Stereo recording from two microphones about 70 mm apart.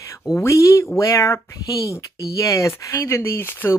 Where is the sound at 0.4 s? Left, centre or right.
Left.